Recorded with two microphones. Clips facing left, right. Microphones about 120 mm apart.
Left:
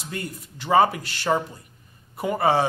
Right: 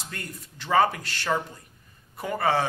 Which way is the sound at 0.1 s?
15° left (ahead or behind).